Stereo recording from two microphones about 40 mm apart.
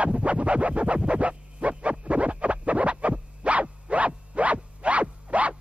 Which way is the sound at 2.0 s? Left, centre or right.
Right.